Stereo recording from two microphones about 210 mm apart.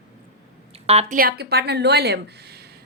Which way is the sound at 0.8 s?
30° right (ahead or behind).